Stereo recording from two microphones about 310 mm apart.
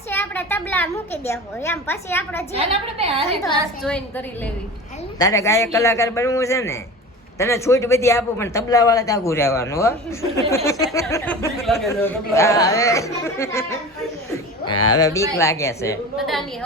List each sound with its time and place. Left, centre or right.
0.1 s speech: centre
2.6 s a woman's voice: centre
3.8 s a woman's voice: centre
5.2 s a woman's voice: centre